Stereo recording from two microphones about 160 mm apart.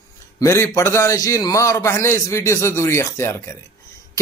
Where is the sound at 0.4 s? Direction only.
15° left (ahead or behind).